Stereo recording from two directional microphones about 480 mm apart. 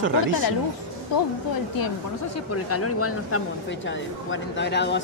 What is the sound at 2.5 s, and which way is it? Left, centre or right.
Speech, left.